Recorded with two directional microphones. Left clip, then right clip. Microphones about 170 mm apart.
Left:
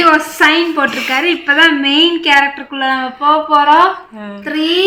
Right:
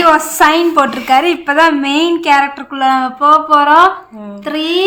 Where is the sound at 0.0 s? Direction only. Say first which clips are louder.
Right 1 dB; 70° right (ahead or behind).